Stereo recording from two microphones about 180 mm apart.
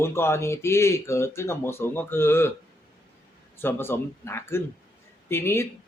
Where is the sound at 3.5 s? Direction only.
10° left (ahead or behind).